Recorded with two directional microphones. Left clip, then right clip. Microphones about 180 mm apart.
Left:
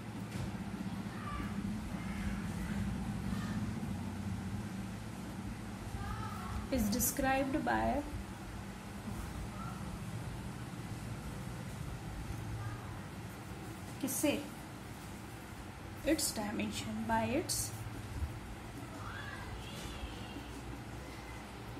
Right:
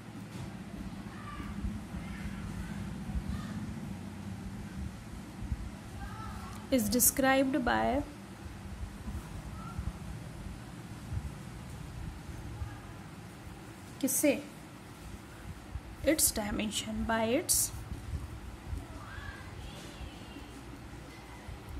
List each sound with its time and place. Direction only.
6.7 s a woman's voice: 40° right (ahead or behind)
14.0 s a sound: 50° right (ahead or behind)
16.1 s a woman's voice: 45° right (ahead or behind)